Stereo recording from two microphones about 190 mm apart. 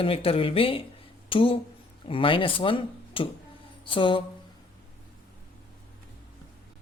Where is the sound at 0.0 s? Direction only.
30° left (ahead or behind).